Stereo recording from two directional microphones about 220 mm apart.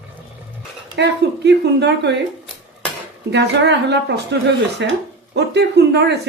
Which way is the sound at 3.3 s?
50° right (ahead or behind).